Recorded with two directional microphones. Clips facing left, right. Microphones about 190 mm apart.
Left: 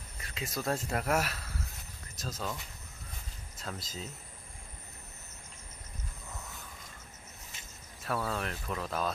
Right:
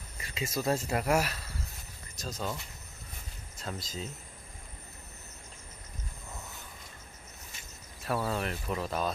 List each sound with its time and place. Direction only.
0.2 s speech: centre (ahead or behind)
3.6 s speech: centre (ahead or behind)
8.0 s speech: 5° right (ahead or behind)